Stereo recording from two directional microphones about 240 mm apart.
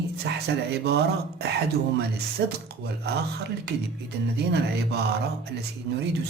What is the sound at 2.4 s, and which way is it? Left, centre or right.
Speech, right.